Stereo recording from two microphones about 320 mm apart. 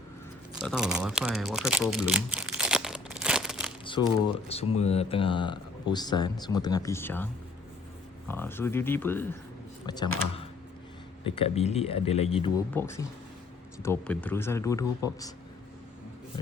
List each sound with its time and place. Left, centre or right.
0.7 s a sound: centre
3.8 s speech: centre
8.3 s speech: centre
11.2 s speech: centre